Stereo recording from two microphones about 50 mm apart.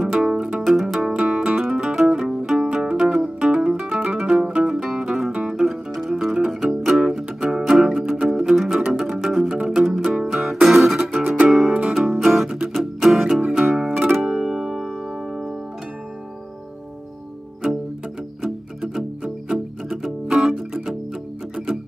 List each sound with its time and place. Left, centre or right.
0.0 s music: centre
4.6 s music: centre
13.4 s music: centre
18.9 s music: centre